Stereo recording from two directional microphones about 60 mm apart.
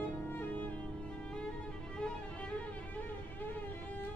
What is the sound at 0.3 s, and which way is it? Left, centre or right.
Music, left.